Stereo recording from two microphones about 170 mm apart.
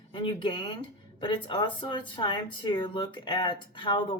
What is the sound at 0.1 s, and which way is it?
Speech, 30° left (ahead or behind).